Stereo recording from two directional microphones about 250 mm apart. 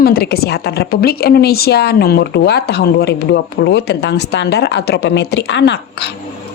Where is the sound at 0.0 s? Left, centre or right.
Left.